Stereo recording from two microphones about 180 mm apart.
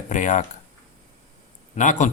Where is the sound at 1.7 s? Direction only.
45° left (ahead or behind).